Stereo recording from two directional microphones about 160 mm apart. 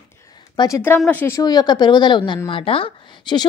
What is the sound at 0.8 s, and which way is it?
Speech, 10° left (ahead or behind).